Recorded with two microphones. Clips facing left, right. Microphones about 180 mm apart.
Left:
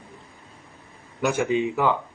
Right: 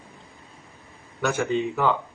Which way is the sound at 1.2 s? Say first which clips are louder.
Left 2 dB; 10° left (ahead or behind).